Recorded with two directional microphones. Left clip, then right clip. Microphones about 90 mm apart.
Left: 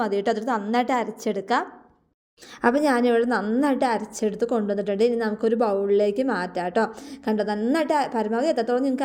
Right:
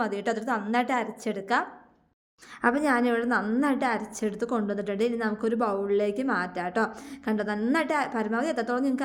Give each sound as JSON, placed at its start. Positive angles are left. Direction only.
{"t": 0.0, "sound": "a woman's voice", "side_deg": 40}